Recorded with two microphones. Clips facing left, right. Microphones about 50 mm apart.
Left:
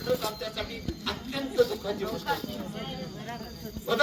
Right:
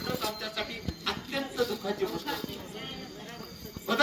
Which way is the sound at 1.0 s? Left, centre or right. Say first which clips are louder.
Right 1 dB; right.